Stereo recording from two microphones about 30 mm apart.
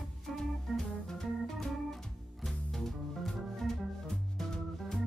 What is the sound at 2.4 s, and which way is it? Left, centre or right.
Music, centre.